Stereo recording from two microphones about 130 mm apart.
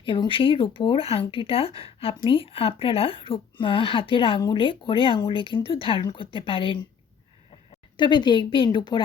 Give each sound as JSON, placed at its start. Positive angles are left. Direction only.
{"t": 0.0, "sound": "speech", "side_deg": 40}
{"t": 7.9, "sound": "speech", "side_deg": 35}